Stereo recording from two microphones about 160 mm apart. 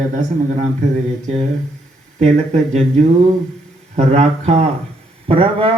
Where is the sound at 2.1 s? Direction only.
45° right (ahead or behind).